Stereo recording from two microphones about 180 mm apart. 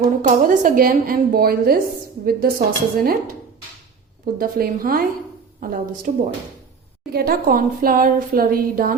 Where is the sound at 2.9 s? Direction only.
55° right (ahead or behind).